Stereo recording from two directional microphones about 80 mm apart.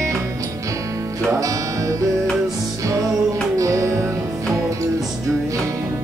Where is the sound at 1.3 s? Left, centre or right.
Right.